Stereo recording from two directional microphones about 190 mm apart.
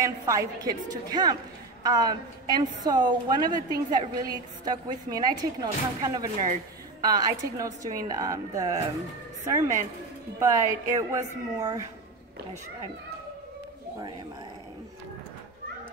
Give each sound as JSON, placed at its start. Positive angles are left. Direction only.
{"t": 0.0, "sound": "a woman's voice", "side_deg": -15}
{"t": 10.4, "sound": "a woman's voice", "side_deg": -15}